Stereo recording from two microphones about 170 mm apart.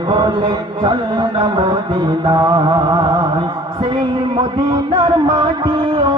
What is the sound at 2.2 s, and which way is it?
Mantra, 25° right (ahead or behind).